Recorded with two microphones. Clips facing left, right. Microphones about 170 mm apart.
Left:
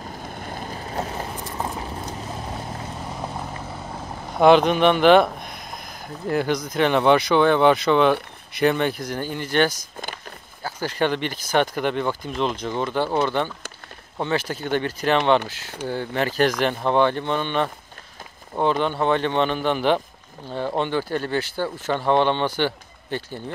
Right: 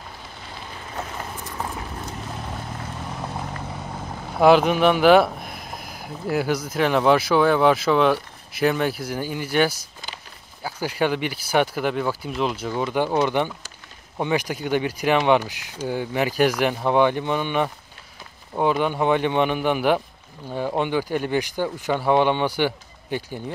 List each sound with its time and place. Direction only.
0.2 s vehicle: 50° left (ahead or behind)
4.3 s speech: 5° right (ahead or behind)